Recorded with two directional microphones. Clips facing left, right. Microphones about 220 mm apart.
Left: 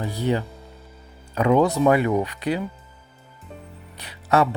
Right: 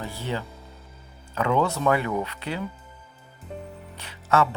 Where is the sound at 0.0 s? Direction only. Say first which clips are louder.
Left 7 dB; 15° left (ahead or behind).